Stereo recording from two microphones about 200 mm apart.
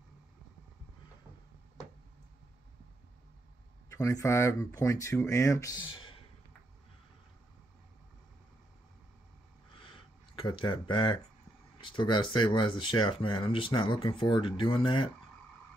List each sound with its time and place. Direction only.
3.9 s speech: 15° left (ahead or behind)
9.8 s a sound: 25° left (ahead or behind)
11.8 s speech: 25° left (ahead or behind)